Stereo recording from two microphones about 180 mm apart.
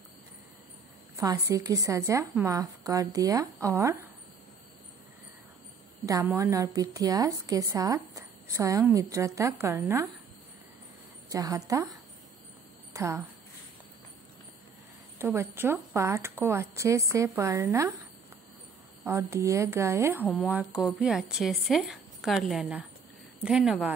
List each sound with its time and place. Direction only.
1.1 s a woman's voice: 20° right (ahead or behind)
6.0 s a woman's voice: 20° right (ahead or behind)
11.2 s a woman's voice: 20° right (ahead or behind)
12.9 s a woman's voice: 15° right (ahead or behind)
15.1 s a woman's voice: 15° right (ahead or behind)
19.0 s a woman's voice: 15° right (ahead or behind)